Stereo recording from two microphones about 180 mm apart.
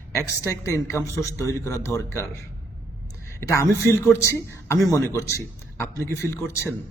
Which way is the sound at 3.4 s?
15° left (ahead or behind).